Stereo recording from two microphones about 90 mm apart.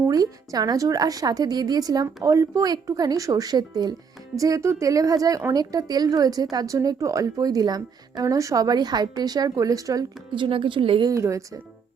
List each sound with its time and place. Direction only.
0.1 s a woman's voice: 45° right (ahead or behind)
10.3 s a woman's voice: 65° right (ahead or behind)
11.0 s a woman's voice: 35° right (ahead or behind)